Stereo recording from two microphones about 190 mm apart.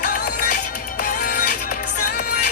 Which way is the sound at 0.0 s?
45° left (ahead or behind).